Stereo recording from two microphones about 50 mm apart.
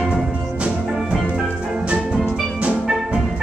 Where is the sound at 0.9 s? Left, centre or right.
Centre.